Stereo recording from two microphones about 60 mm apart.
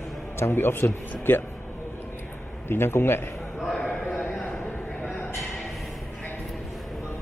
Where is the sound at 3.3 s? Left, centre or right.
Centre.